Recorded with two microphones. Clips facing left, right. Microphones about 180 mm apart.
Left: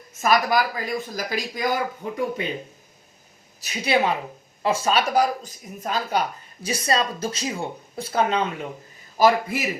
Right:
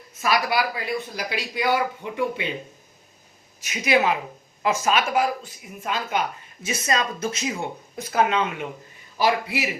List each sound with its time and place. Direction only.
0.1 s speech: 45° left (ahead or behind)
3.6 s speech: 35° left (ahead or behind)
9.1 s speech: 45° left (ahead or behind)